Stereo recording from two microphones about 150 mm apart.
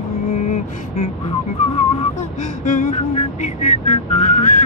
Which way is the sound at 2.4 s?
55° left (ahead or behind).